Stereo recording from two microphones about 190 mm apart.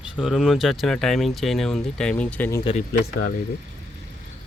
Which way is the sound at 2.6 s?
35° left (ahead or behind).